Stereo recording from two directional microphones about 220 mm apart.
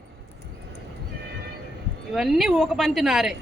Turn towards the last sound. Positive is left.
turn(degrees=0)  # may be behind; listen again after turning